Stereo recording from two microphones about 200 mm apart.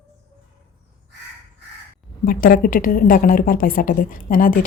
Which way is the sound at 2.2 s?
45° left (ahead or behind).